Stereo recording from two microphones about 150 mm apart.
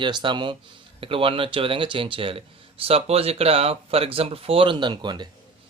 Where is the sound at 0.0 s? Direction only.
30° right (ahead or behind).